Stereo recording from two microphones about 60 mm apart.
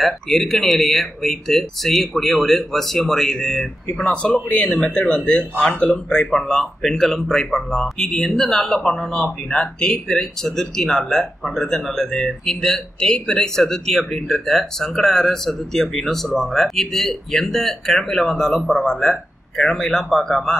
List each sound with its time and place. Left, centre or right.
0.0 s speech: centre
4.0 s speech: centre